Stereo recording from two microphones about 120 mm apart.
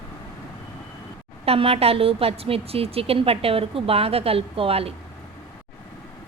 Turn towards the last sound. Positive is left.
turn(degrees=-55)  # may be behind; listen again after turning